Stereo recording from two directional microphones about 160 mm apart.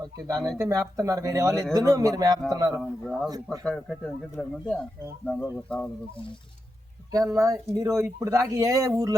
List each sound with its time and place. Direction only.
0.6 s speech: 20° right (ahead or behind)
2.8 s speech: 5° left (ahead or behind)
3.2 s speech: 20° right (ahead or behind)
3.6 s speech: 5° left (ahead or behind)
7.1 s speech: 20° right (ahead or behind)